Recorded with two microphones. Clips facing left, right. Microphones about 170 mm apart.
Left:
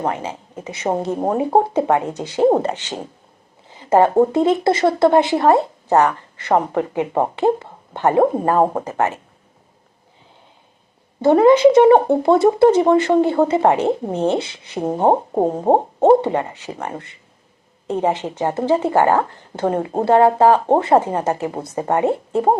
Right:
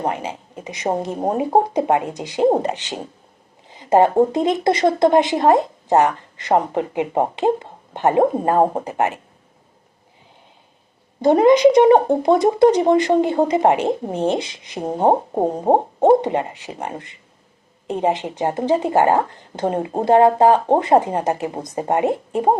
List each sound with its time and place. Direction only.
0.0 s speech: 15° right (ahead or behind)
11.2 s speech: 20° right (ahead or behind)